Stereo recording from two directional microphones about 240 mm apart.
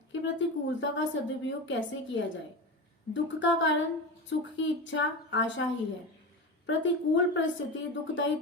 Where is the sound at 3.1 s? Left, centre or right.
Left.